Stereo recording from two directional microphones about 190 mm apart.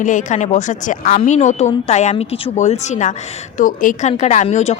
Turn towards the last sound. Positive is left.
turn(degrees=35)  # may be behind; listen again after turning